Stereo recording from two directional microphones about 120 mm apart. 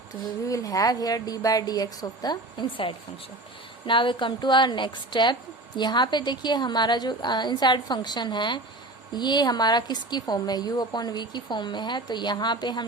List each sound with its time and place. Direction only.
0.4 s a woman's voice: 30° left (ahead or behind)